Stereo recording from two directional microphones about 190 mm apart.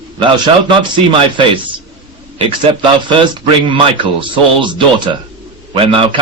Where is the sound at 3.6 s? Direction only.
25° right (ahead or behind).